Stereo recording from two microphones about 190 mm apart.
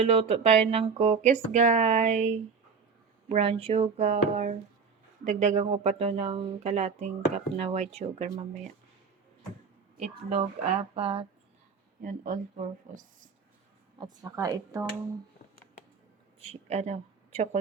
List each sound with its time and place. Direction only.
0.0 s speech: 35° right (ahead or behind)
10.0 s speech: 35° right (ahead or behind)
12.0 s speech: 40° right (ahead or behind)
14.0 s speech: 20° right (ahead or behind)
16.4 s a woman's voice: 35° right (ahead or behind)